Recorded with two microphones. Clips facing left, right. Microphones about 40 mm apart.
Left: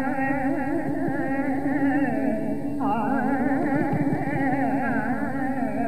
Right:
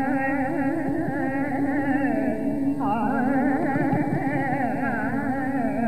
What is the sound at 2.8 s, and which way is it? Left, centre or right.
Music, centre.